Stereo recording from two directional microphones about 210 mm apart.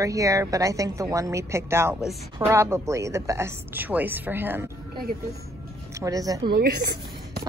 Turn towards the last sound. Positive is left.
turn(degrees=-50)  # may be behind; listen again after turning